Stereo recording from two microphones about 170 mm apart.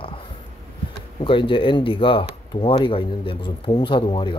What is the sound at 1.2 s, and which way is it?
Speech, 30° left (ahead or behind).